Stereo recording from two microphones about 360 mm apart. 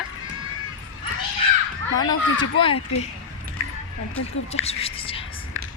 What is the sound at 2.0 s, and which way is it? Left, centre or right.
Speech, centre.